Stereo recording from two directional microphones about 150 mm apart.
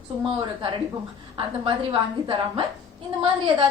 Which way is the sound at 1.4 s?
35° right (ahead or behind).